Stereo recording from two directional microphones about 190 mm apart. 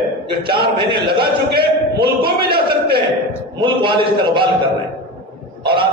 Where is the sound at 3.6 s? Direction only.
25° right (ahead or behind).